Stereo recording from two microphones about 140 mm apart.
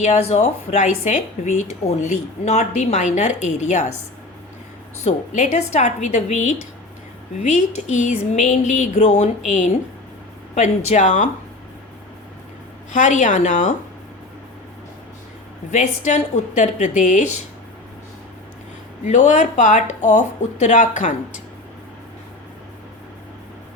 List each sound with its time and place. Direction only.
0.0 s speech: 55° left (ahead or behind)
5.0 s speech: 55° left (ahead or behind)
12.9 s speech: 65° left (ahead or behind)
15.7 s speech: 60° left (ahead or behind)
19.0 s speech: 60° left (ahead or behind)